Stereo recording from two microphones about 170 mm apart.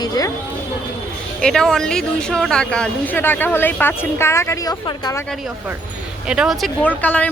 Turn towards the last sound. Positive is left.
turn(degrees=10)  # may be behind; listen again after turning